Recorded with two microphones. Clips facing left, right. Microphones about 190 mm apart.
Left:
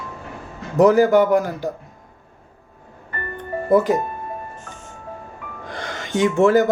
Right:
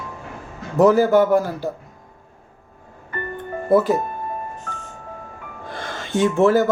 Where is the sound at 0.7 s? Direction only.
15° left (ahead or behind).